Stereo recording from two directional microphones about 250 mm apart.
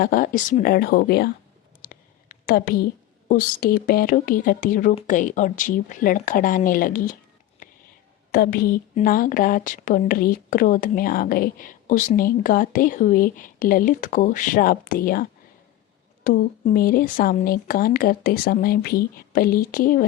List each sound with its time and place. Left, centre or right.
0.0 s speech: left
7.6 s whispering: left
8.3 s speech: left